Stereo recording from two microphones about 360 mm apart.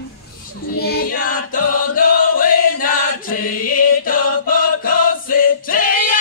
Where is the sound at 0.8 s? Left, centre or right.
Left.